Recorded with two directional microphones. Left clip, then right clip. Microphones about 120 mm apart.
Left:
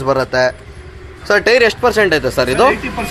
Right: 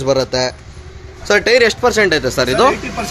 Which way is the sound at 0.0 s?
30° right (ahead or behind).